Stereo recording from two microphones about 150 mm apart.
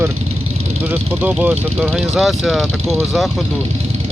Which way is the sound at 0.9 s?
10° right (ahead or behind).